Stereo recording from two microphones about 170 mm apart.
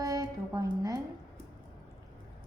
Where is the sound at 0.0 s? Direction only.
20° right (ahead or behind).